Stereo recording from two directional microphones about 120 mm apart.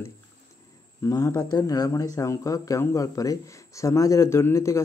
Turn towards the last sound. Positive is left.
turn(degrees=25)  # may be behind; listen again after turning